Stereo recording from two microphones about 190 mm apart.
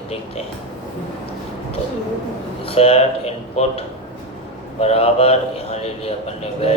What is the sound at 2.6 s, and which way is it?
A man's voice, 30° left (ahead or behind).